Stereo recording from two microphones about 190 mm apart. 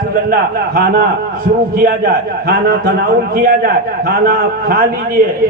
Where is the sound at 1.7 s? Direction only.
50° right (ahead or behind).